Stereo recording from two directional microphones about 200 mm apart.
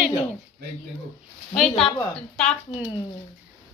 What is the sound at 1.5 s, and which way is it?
Speech, centre (ahead or behind).